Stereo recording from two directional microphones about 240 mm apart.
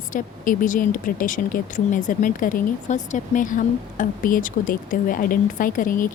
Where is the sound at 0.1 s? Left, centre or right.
Left.